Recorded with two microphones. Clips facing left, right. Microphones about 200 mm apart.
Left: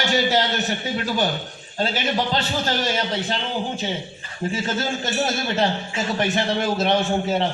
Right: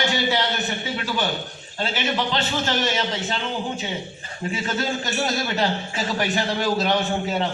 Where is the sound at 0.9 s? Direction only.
40° left (ahead or behind).